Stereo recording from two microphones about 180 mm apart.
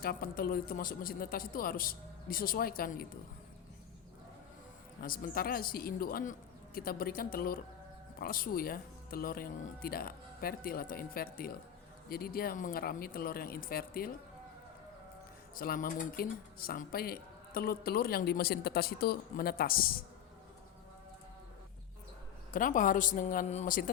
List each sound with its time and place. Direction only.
0.0 s speech: 55° left (ahead or behind)
4.9 s speech: 55° left (ahead or behind)
15.5 s speech: 55° left (ahead or behind)
22.5 s speech: 50° left (ahead or behind)